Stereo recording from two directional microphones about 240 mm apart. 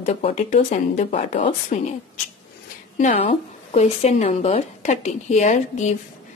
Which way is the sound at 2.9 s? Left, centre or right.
Left.